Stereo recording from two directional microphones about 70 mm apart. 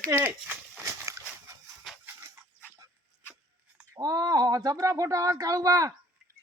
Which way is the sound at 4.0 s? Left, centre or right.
Right.